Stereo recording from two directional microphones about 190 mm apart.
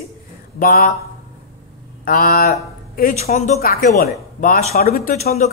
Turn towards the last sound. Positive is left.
turn(degrees=50)  # may be behind; listen again after turning